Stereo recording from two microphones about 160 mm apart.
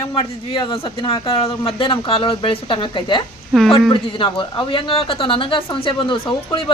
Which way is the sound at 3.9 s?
30° left (ahead or behind).